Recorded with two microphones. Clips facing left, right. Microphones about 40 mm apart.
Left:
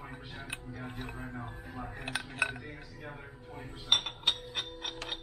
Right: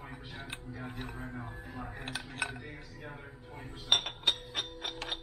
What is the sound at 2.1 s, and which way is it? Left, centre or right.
Dishes, left.